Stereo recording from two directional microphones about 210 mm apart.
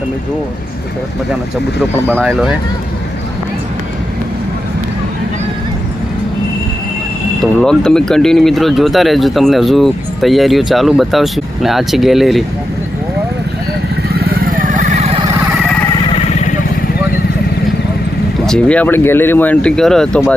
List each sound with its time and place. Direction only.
2.1 s speech: centre (ahead or behind)
7.6 s speech: 5° left (ahead or behind)
14.2 s vehicle: 40° right (ahead or behind)
18.4 s speech: 5° left (ahead or behind)